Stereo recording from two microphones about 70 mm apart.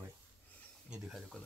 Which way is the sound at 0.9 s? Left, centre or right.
Centre.